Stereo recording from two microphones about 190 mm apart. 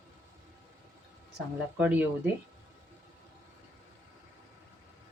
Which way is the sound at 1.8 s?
5° right (ahead or behind).